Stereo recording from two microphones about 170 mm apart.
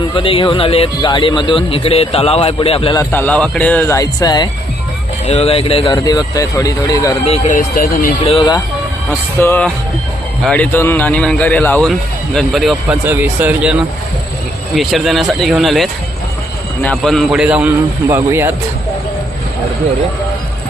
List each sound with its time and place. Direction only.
0.2 s speech: 30° left (ahead or behind)
2.9 s speech: 15° left (ahead or behind)
5.2 s speech: 40° left (ahead or behind)
5.8 s speech: 25° left (ahead or behind)
7.3 s speech: 40° left (ahead or behind)
8.2 s speech: 30° left (ahead or behind)
9.4 s speech: 15° left (ahead or behind); by 13.7 s 10° right (ahead or behind)
14.8 s speech: centre (ahead or behind)